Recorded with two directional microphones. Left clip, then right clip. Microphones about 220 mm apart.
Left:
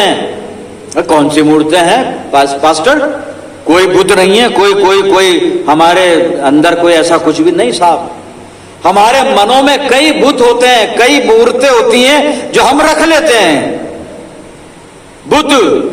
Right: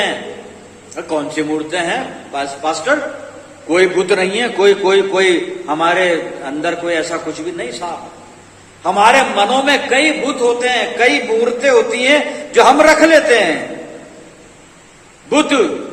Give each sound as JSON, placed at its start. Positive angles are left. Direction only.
{"t": 0.9, "sound": "a man's voice", "side_deg": 50}
{"t": 15.3, "sound": "a man's voice", "side_deg": 50}